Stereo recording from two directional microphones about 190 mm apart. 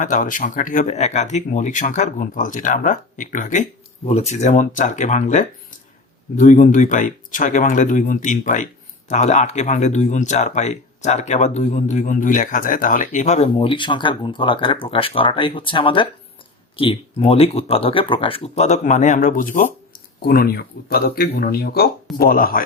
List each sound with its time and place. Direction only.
0.0 s speech: 45° left (ahead or behind)